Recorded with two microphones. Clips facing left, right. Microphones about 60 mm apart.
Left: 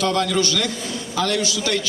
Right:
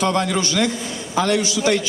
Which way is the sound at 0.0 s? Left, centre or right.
Right.